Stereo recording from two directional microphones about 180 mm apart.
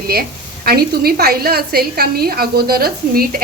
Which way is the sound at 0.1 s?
55° right (ahead or behind).